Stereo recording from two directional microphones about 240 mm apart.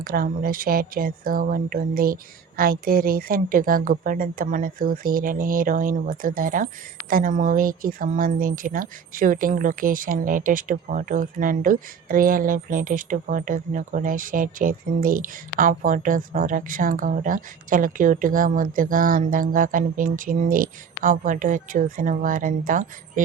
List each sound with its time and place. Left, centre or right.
0.0 s speech: right